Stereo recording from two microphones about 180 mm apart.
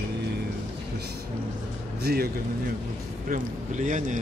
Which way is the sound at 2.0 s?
60° right (ahead or behind).